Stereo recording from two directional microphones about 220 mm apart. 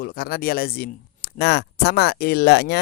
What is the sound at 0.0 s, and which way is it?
Speech, 45° left (ahead or behind).